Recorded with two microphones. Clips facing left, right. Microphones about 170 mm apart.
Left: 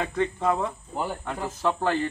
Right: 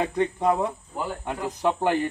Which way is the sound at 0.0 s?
15° right (ahead or behind).